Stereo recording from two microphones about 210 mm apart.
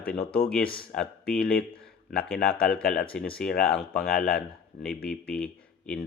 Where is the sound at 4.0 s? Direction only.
45° left (ahead or behind).